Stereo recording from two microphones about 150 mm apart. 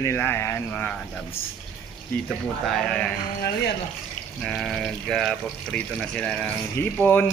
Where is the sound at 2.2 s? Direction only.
5° left (ahead or behind).